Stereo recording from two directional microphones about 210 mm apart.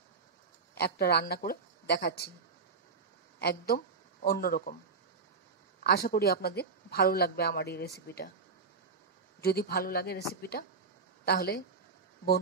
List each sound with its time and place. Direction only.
0.7 s speech: 50° left (ahead or behind)
3.3 s speech: 50° left (ahead or behind)
5.9 s speech: 50° left (ahead or behind)
9.4 s speech: 50° left (ahead or behind)